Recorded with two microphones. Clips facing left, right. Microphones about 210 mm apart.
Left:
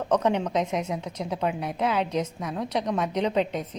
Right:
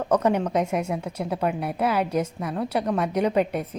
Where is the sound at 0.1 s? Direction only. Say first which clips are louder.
Right 2 dB; 5° right (ahead or behind).